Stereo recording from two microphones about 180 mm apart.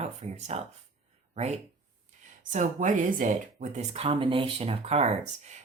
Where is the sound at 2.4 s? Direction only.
45° right (ahead or behind).